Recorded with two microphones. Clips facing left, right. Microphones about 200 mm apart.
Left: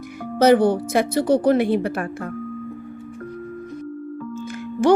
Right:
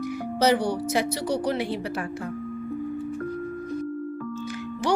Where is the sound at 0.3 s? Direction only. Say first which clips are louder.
Left 8 dB; 50° left (ahead or behind).